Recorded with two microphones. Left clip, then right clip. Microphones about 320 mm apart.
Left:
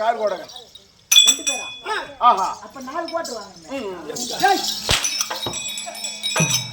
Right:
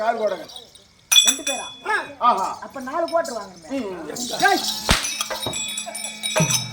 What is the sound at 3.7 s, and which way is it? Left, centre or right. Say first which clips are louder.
Speech: left 1 dB; centre.